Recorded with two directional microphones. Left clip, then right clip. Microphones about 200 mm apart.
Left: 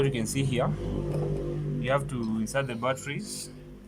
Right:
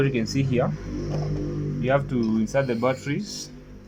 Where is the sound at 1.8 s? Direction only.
10° right (ahead or behind).